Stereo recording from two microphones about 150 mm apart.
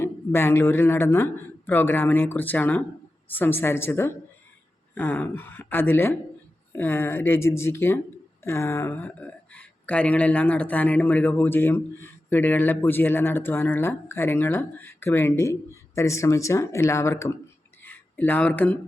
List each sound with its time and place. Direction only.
0.0 s speech: 15° left (ahead or behind)